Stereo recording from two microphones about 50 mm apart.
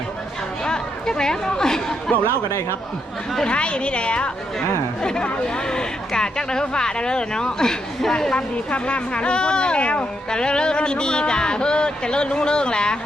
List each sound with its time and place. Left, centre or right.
0.6 s speech: centre
2.5 s speech: left
3.4 s speech: left
8.4 s speech: left